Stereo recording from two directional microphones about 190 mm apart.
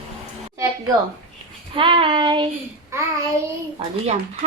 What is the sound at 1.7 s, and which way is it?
Child singing, 25° right (ahead or behind).